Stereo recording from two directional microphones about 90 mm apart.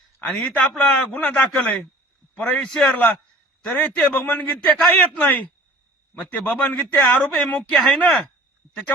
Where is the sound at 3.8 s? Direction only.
20° left (ahead or behind).